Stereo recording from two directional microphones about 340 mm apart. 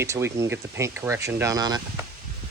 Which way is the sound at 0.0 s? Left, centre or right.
Centre.